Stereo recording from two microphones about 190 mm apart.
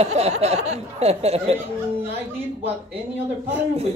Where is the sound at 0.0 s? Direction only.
35° right (ahead or behind).